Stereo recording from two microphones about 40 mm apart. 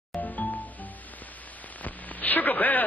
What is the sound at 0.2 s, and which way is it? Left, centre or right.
Music, left.